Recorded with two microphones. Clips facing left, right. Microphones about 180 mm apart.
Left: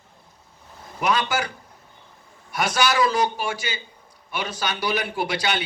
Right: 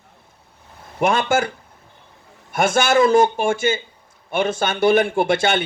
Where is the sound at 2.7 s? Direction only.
50° right (ahead or behind).